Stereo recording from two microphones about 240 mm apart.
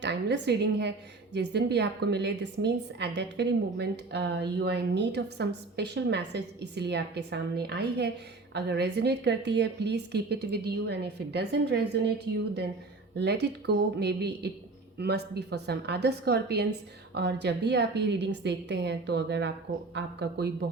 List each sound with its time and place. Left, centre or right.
0.0 s a woman's voice: right